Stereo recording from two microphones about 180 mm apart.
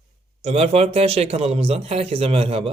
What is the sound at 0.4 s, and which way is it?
Speech, 35° right (ahead or behind).